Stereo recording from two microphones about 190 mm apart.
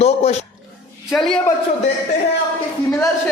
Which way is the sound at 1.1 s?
Centre (ahead or behind).